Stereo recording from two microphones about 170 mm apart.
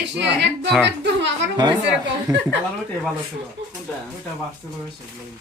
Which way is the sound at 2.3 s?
20° right (ahead or behind).